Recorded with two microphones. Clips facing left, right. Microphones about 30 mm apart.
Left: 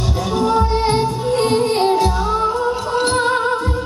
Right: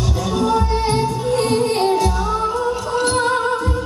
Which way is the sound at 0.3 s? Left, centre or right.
Left.